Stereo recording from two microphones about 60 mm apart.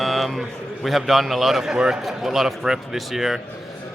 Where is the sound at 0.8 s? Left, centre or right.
Centre.